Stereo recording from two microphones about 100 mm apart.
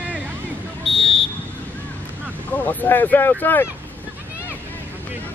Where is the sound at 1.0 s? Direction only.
70° left (ahead or behind).